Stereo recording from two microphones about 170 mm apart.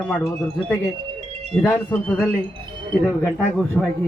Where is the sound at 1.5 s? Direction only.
10° left (ahead or behind).